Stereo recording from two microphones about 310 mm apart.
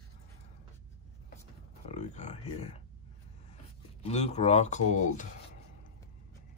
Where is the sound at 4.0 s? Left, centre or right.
Centre.